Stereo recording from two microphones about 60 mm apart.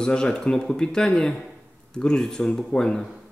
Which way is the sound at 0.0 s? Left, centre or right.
Centre.